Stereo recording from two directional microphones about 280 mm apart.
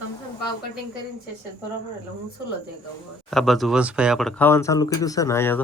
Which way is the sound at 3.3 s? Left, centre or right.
Centre.